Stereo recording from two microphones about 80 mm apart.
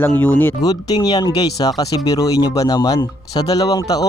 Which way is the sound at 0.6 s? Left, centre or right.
Left.